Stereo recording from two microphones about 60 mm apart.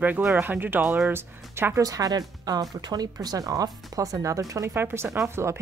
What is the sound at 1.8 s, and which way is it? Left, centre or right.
Speech, right.